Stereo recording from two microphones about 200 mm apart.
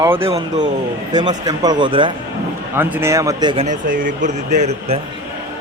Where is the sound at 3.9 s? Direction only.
40° right (ahead or behind).